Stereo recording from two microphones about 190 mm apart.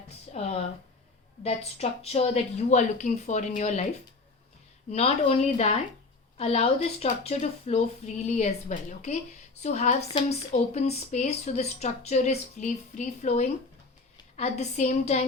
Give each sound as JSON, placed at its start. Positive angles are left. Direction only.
{"t": 0.3, "sound": "a sound", "side_deg": 35}
{"t": 1.5, "sound": "speech", "side_deg": 30}
{"t": 4.9, "sound": "speech", "side_deg": 35}